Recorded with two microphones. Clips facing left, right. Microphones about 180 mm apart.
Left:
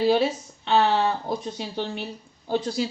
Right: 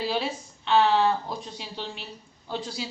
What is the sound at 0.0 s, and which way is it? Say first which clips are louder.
Speech: left 8 dB; 55° left (ahead or behind).